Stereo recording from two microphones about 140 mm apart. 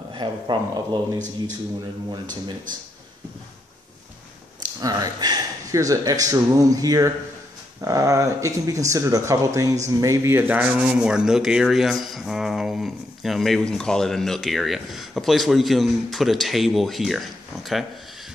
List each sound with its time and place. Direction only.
0.1 s speech: 35° right (ahead or behind)
4.6 s speech: 25° right (ahead or behind)
9.8 s rub: 20° right (ahead or behind); by 17.2 s centre (ahead or behind)